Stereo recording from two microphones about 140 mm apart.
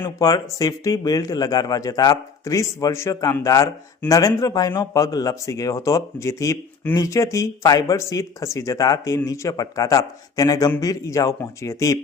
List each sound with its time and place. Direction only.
0.2 s speech: 25° left (ahead or behind)